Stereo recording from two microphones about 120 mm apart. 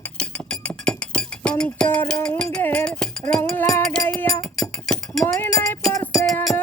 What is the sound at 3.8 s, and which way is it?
Music, 5° left (ahead or behind).